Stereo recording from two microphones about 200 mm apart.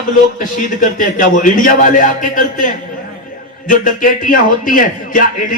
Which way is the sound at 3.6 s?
40° left (ahead or behind).